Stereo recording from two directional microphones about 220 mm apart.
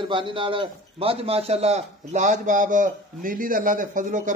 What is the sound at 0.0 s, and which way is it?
A man's voice, 20° right (ahead or behind).